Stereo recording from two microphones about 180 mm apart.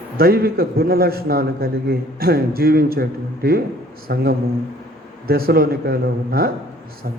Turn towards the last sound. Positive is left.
turn(degrees=-55)  # may be behind; listen again after turning